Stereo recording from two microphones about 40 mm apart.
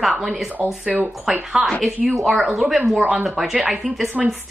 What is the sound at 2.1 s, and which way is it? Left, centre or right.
A woman's voice, centre.